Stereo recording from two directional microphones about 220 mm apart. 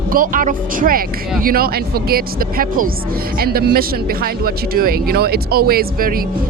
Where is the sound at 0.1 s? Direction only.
40° right (ahead or behind).